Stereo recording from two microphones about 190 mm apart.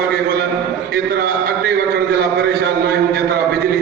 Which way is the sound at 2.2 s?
60° right (ahead or behind).